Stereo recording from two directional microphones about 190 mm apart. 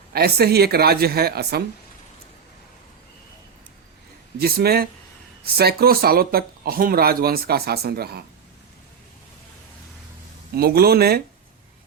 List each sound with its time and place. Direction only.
0.1 s a woman's voice: 55° right (ahead or behind)
4.4 s speech: 55° right (ahead or behind)
10.5 s a woman's voice: 55° right (ahead or behind)